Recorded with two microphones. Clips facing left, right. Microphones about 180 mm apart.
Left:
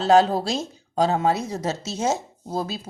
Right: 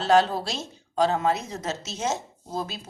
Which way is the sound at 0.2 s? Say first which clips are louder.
Left 4 dB; 40° left (ahead or behind).